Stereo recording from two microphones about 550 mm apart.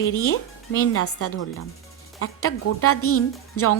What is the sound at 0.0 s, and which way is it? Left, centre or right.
A woman's voice, left.